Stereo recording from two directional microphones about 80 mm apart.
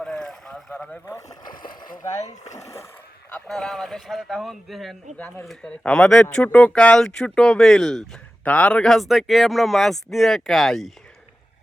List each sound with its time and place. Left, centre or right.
0.0 s boat: centre
1.3 s speech: left
3.4 s a man's voice: centre
5.1 s a man's voice: centre